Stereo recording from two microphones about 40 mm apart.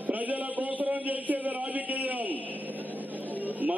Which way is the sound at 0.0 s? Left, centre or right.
Right.